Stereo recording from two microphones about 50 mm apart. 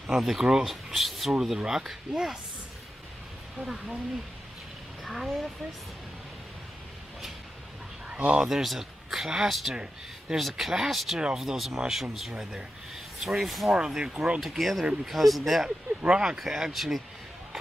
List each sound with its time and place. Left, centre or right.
0.2 s speech: centre
3.5 s speech: centre
5.0 s speech: centre
8.1 s a man's voice: right
8.5 s speech: centre
14.1 s speech: right
14.4 s speech: centre
16.0 s speech: centre